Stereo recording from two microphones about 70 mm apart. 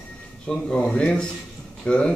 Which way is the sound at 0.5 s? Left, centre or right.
Centre.